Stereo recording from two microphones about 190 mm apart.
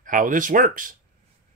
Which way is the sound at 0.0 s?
45° right (ahead or behind).